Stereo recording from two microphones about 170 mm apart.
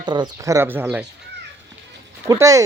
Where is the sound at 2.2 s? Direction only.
20° right (ahead or behind).